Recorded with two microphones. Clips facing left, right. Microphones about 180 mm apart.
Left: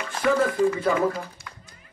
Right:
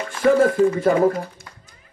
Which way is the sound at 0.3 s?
45° right (ahead or behind).